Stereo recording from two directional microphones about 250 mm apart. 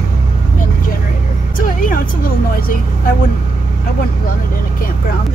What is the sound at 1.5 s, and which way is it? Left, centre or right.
Speech, left.